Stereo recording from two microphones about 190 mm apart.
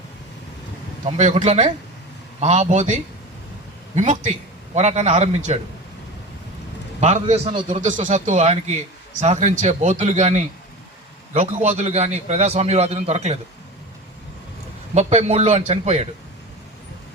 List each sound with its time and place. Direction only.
1.0 s a man's voice: 35° right (ahead or behind)
7.0 s a man's voice: 35° right (ahead or behind)
14.9 s a man's voice: 35° right (ahead or behind)